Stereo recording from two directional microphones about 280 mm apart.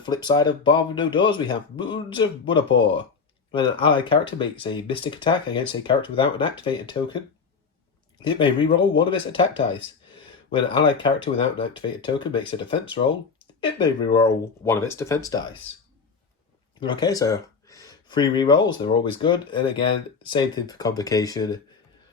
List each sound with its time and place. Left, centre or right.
0.0 s speech: centre
8.2 s speech: centre
16.8 s speech: centre